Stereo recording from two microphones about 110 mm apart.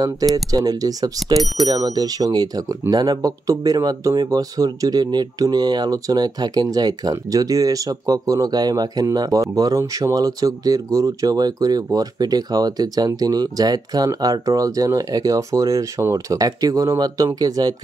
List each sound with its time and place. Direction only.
0.5 s speech: 35° right (ahead or behind)